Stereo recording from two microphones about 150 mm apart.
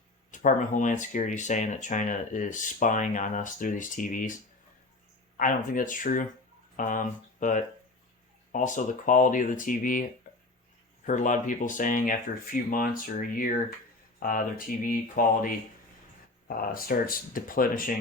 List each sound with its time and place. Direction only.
0.3 s speech: 55° left (ahead or behind)
5.4 s speech: 65° left (ahead or behind)